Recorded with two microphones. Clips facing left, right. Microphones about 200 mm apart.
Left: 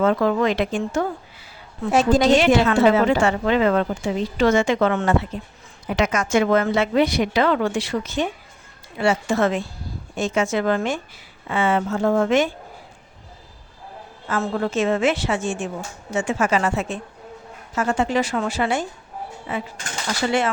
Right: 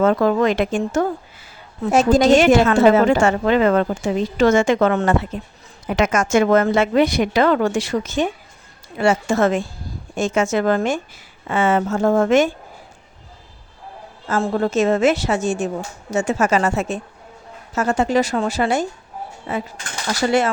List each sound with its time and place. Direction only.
0.0 s a woman's voice: 45° right (ahead or behind)
14.4 s a woman's voice: 40° right (ahead or behind)